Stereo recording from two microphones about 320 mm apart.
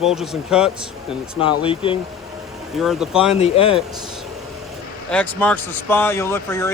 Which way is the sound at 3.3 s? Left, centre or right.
Centre.